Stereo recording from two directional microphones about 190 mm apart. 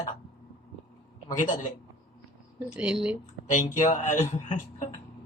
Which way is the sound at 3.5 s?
40° left (ahead or behind).